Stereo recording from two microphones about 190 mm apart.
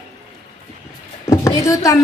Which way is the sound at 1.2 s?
15° left (ahead or behind).